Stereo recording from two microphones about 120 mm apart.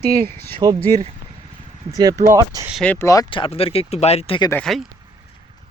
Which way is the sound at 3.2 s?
45° left (ahead or behind).